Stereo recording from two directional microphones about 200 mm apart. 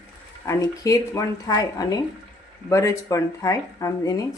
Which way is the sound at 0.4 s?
15° left (ahead or behind).